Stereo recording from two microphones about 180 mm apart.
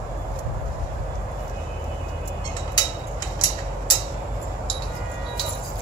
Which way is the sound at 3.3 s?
25° left (ahead or behind).